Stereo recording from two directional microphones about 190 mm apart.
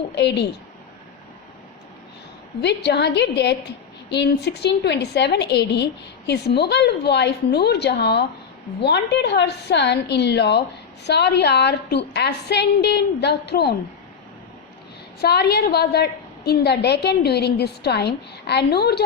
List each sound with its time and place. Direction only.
0.1 s a woman's voice: 65° left (ahead or behind)
2.6 s a woman's voice: 60° left (ahead or behind)
15.2 s a woman's voice: 60° left (ahead or behind)